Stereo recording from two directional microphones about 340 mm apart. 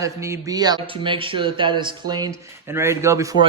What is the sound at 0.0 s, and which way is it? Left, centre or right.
Speech, centre.